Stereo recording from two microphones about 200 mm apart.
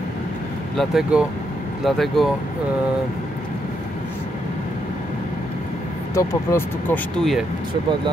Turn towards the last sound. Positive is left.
turn(degrees=0)  # may be behind; listen again after turning